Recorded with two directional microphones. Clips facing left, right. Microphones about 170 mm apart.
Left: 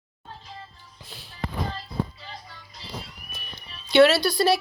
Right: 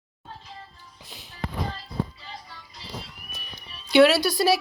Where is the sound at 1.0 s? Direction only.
15° right (ahead or behind).